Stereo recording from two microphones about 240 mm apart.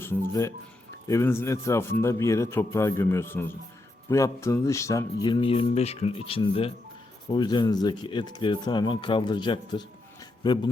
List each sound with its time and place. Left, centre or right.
0.0 s a man's voice: centre